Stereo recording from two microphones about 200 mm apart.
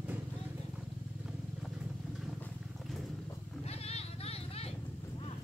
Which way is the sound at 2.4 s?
Centre (ahead or behind).